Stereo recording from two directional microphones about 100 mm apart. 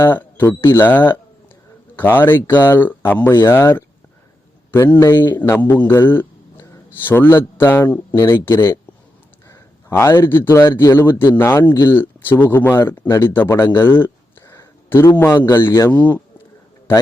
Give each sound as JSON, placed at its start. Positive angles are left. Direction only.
{"t": 0.0, "sound": "a man's voice", "side_deg": 20}
{"t": 13.7, "sound": "a sound", "side_deg": 20}
{"t": 14.8, "sound": "a man's voice", "side_deg": 20}